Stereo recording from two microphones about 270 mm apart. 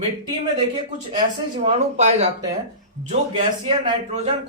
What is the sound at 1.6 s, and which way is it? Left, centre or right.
Speech, right.